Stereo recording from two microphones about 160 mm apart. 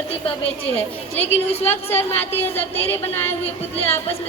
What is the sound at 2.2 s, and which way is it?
Speech, 15° left (ahead or behind).